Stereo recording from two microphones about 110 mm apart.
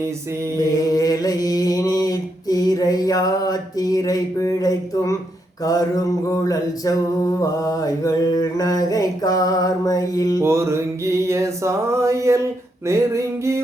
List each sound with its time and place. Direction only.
0.0 s music: 25° right (ahead or behind)
0.9 s mantra: 35° left (ahead or behind)
10.4 s music: 25° right (ahead or behind)